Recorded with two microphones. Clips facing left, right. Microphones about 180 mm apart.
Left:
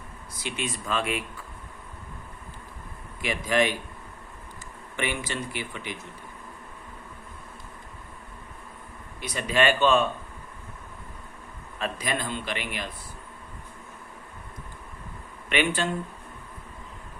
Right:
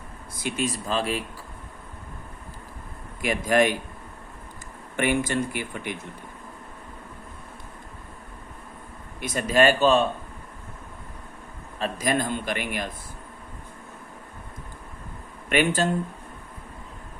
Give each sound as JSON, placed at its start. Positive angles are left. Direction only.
{"t": 0.3, "sound": "speech", "side_deg": -45}
{"t": 3.2, "sound": "a man's voice", "side_deg": -45}
{"t": 4.9, "sound": "a man's voice", "side_deg": -50}
{"t": 9.2, "sound": "speech", "side_deg": -45}
{"t": 11.8, "sound": "a man's voice", "side_deg": -45}
{"t": 15.4, "sound": "speech", "side_deg": -45}